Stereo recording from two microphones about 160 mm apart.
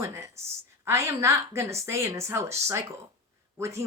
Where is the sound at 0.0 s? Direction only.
20° right (ahead or behind).